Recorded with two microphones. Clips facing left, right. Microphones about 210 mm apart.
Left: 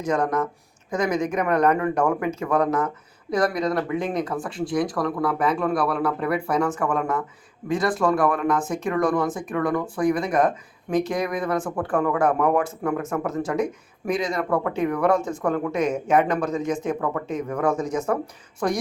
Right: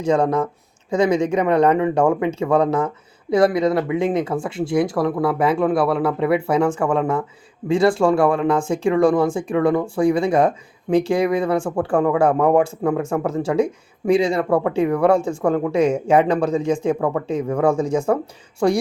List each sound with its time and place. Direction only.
0.0 s speech: 30° right (ahead or behind)